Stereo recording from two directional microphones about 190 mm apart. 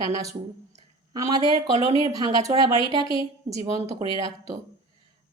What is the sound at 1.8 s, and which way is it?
Speech, 30° left (ahead or behind).